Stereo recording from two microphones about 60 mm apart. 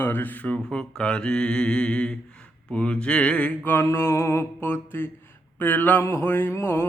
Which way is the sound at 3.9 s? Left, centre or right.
Left.